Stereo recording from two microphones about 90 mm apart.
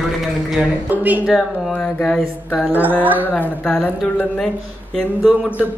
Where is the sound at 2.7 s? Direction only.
20° right (ahead or behind).